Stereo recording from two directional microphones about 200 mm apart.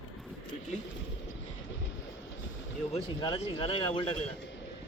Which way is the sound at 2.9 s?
25° left (ahead or behind).